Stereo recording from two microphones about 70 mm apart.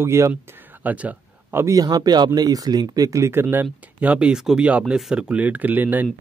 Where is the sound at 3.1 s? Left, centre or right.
Right.